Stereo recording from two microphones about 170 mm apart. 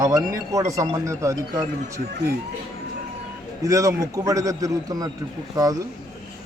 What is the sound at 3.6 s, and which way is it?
Speech, 20° right (ahead or behind).